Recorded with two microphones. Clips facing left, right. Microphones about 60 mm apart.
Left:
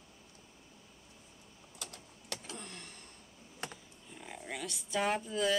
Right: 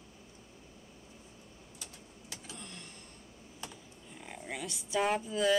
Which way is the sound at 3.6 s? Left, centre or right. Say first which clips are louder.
Left 3 dB; left.